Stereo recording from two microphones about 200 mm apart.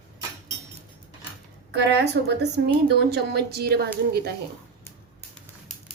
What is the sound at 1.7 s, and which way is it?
Speech, 55° right (ahead or behind).